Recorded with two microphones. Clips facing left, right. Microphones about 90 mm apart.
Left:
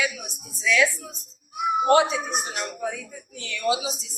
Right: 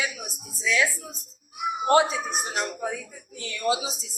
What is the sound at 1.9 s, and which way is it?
Speech, 30° right (ahead or behind).